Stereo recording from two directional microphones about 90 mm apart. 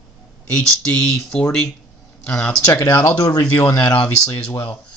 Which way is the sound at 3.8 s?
15° left (ahead or behind).